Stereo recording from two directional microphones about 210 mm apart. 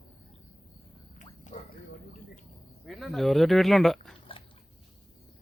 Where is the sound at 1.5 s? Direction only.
35° left (ahead or behind).